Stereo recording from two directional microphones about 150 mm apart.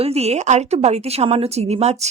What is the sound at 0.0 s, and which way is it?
Speech, 45° right (ahead or behind).